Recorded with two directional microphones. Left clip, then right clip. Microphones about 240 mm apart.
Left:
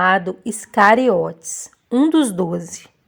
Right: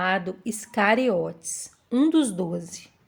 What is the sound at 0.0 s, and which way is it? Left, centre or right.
Speech, left.